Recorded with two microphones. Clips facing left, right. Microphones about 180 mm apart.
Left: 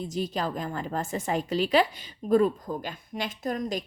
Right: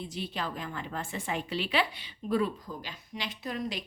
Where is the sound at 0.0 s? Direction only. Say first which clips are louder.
Left 6 dB; 40° left (ahead or behind).